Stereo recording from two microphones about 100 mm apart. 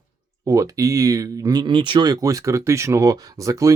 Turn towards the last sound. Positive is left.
turn(degrees=-30)  # may be behind; listen again after turning